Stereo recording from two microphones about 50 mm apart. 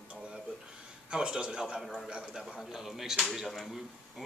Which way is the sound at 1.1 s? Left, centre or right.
Centre.